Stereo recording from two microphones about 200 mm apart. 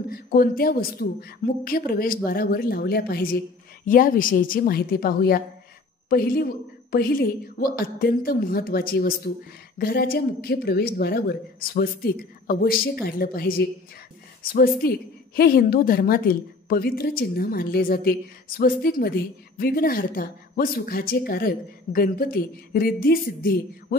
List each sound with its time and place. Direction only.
0.1 s a woman's voice: 45° left (ahead or behind)